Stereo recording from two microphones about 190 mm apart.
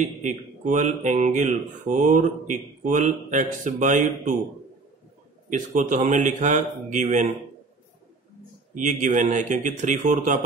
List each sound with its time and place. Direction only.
0.2 s speech: 40° right (ahead or behind)
5.5 s speech: 40° right (ahead or behind)
8.7 s speech: 40° right (ahead or behind)